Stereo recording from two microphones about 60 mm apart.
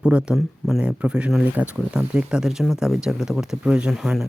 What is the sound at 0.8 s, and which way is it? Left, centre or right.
Speech, centre.